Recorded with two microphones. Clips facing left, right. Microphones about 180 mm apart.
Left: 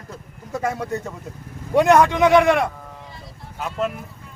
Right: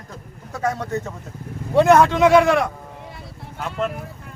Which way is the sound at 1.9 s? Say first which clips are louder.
Even; 15° left (ahead or behind).